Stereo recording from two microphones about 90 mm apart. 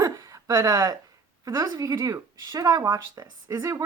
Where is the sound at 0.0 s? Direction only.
40° right (ahead or behind).